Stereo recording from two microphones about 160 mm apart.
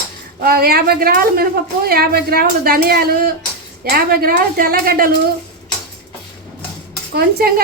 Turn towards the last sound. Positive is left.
turn(degrees=-70)  # may be behind; listen again after turning